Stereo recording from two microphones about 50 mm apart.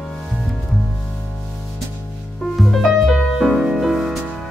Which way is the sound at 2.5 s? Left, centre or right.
Centre.